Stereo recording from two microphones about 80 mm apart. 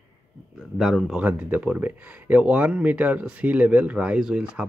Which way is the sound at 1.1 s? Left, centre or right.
Centre.